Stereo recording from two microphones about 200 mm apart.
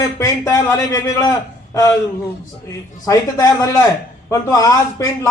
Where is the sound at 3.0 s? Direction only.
15° left (ahead or behind).